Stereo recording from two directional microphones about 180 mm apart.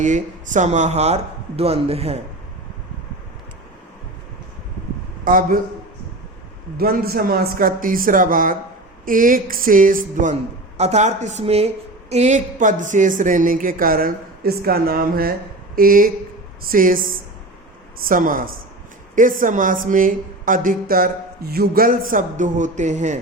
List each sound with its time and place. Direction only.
0.0 s speech: 45° right (ahead or behind)
5.2 s a man's voice: 50° right (ahead or behind)
6.7 s a woman's voice: 55° right (ahead or behind); by 23.2 s 40° right (ahead or behind)